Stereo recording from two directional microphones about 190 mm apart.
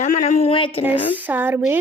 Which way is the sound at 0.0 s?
40° left (ahead or behind).